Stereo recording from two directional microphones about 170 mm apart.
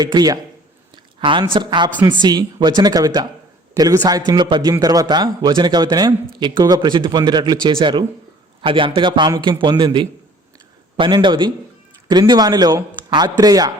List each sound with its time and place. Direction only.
0.0 s a man's voice: 25° right (ahead or behind)